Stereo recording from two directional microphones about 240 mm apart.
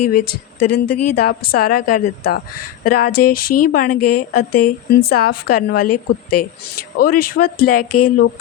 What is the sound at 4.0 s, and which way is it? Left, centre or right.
Speech, left.